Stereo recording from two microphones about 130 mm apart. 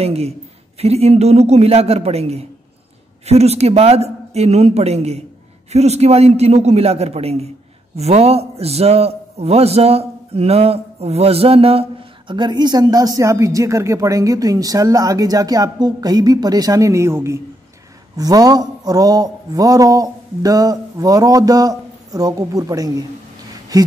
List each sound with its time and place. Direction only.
0.0 s a man's voice: 50° right (ahead or behind)
12.4 s speech: 35° right (ahead or behind)